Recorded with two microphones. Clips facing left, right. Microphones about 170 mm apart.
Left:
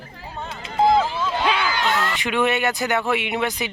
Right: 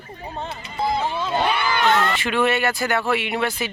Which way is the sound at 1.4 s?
90° left.